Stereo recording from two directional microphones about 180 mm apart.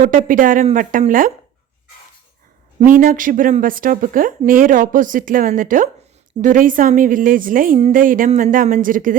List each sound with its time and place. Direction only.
0.3 s a woman's voice: 50° right (ahead or behind)
2.8 s a woman's voice: 45° right (ahead or behind)